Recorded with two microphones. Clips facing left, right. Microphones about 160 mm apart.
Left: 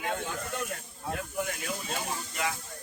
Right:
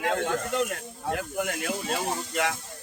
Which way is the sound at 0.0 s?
80° right.